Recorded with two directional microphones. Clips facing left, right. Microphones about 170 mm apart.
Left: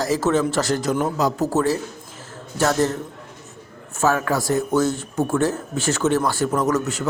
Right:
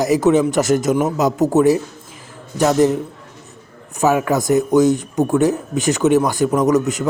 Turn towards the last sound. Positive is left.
turn(degrees=-15)  # may be behind; listen again after turning